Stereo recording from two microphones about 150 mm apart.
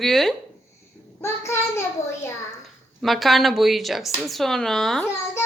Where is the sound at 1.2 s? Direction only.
15° left (ahead or behind).